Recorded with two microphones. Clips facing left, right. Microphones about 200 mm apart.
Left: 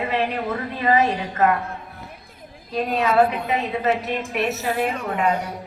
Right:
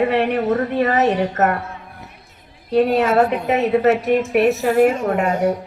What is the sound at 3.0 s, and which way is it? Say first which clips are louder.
Speech: right 3 dB; 45° right (ahead or behind).